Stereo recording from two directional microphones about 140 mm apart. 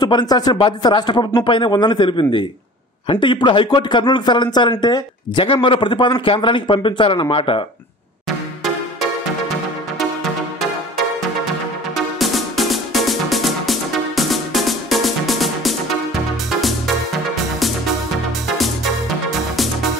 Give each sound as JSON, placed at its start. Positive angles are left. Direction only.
{"t": 0.0, "sound": "a man's voice", "side_deg": 30}
{"t": 11.9, "sound": "music", "side_deg": 0}